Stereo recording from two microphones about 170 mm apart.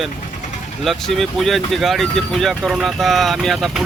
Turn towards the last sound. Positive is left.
turn(degrees=0)  # may be behind; listen again after turning